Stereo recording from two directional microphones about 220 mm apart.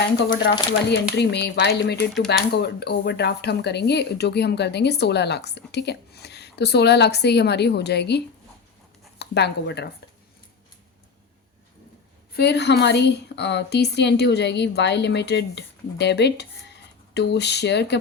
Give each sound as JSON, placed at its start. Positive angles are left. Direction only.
{"t": 0.3, "sound": "speech", "side_deg": 50}
{"t": 12.4, "sound": "speech", "side_deg": 50}